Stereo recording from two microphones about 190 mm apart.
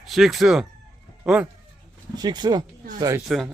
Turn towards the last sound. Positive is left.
turn(degrees=0)  # may be behind; listen again after turning